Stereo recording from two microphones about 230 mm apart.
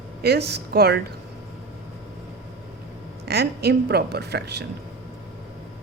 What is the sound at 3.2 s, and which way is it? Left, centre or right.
A woman's voice, right.